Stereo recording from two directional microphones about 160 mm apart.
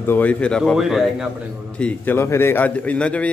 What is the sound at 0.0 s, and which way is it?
A man's voice, 10° left (ahead or behind).